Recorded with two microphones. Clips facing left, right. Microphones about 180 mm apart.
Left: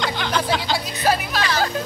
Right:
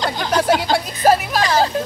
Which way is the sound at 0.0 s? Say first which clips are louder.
Right 3 dB; 40° right (ahead or behind).